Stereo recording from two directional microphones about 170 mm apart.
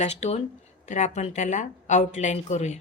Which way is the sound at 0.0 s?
40° left (ahead or behind).